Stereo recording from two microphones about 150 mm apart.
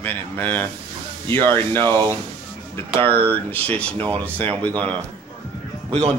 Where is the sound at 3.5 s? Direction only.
10° left (ahead or behind).